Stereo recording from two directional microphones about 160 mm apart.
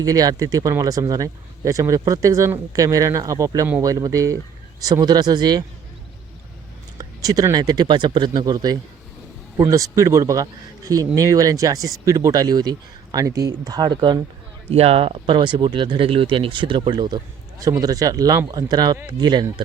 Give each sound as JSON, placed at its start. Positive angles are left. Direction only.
{"t": 0.0, "sound": "speech", "side_deg": -20}
{"t": 7.0, "sound": "speech", "side_deg": -25}
{"t": 14.7, "sound": "speech", "side_deg": -40}